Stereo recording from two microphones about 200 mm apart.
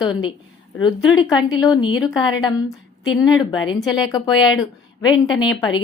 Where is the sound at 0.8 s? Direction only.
25° left (ahead or behind).